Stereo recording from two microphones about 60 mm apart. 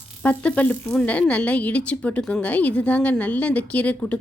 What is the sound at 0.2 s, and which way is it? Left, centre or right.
A woman's voice, left.